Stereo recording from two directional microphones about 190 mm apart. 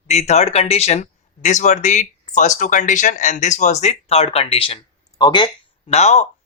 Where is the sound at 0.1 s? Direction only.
35° left (ahead or behind).